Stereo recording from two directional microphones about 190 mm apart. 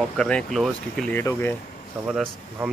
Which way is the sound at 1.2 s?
15° left (ahead or behind).